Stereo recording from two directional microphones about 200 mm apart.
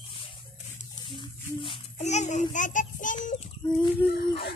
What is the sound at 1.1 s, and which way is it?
A child's voice, 25° left (ahead or behind).